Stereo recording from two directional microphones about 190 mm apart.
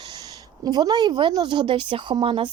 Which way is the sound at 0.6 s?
20° right (ahead or behind).